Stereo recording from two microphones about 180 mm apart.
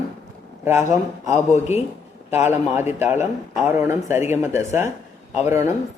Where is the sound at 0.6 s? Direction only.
15° right (ahead or behind).